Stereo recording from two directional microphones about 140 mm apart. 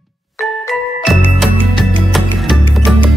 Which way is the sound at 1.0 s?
Centre (ahead or behind).